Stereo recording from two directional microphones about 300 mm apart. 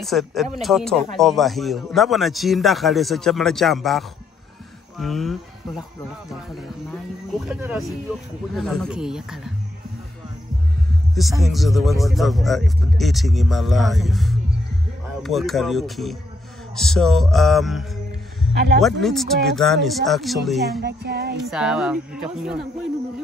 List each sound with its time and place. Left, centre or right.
0.0 s a man's voice: centre
6.5 s a man's voice: centre
11.4 s a man's voice: centre
18.5 s speech: right
18.8 s a man's voice: centre
20.8 s child singing: right
21.5 s a man's voice: centre